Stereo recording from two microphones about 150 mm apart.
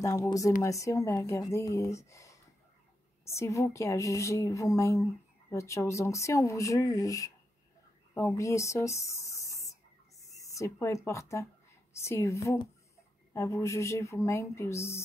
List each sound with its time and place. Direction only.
0.0 s speech: 20° left (ahead or behind)
8.1 s a sound: 20° left (ahead or behind)
12.0 s speech: 20° left (ahead or behind)